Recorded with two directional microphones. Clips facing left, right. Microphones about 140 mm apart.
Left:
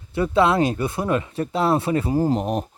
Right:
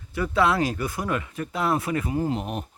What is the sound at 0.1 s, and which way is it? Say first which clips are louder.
Speech: left 4 dB; 25° left (ahead or behind).